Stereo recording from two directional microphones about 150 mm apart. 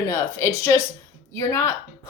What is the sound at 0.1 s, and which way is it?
A woman's voice, 20° left (ahead or behind).